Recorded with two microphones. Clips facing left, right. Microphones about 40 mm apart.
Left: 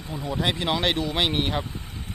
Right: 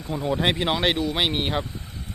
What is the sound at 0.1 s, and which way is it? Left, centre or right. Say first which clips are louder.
Speech: right 4 dB; right.